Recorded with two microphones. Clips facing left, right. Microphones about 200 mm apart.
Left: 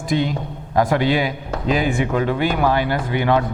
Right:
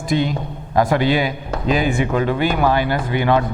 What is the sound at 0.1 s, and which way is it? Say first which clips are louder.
Speech: right 1 dB; 15° right (ahead or behind).